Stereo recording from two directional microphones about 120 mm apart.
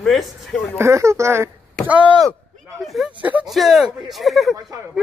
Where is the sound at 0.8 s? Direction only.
25° right (ahead or behind).